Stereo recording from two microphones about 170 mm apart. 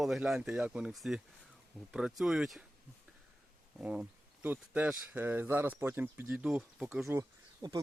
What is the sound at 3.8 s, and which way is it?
Speech, 10° right (ahead or behind).